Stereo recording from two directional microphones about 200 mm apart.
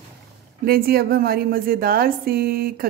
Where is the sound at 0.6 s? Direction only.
50° right (ahead or behind).